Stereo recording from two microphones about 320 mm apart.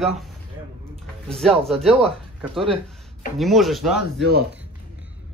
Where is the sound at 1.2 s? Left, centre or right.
Centre.